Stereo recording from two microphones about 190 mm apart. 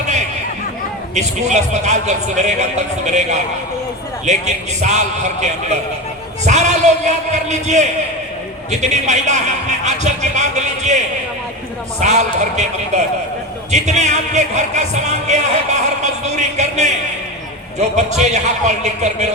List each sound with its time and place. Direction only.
1.1 s speech: 40° right (ahead or behind)
13.7 s speech: 40° right (ahead or behind)